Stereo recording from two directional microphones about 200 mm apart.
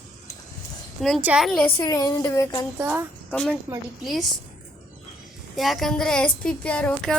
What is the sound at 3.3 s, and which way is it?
Speech, 5° left (ahead or behind).